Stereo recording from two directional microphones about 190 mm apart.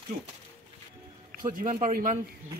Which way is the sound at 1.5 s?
45° right (ahead or behind).